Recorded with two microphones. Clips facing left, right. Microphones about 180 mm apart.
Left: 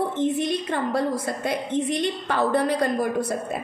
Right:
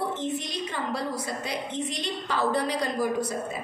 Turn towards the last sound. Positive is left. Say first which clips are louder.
# left 5 dB
turn(degrees=55)  # may be behind; listen again after turning